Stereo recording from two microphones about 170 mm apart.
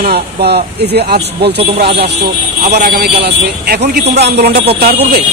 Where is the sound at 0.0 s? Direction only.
70° right (ahead or behind).